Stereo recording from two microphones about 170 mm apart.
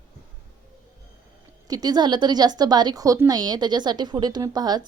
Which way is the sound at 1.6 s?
20° right (ahead or behind).